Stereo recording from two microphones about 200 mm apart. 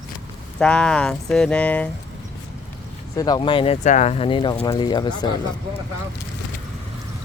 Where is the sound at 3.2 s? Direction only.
20° left (ahead or behind).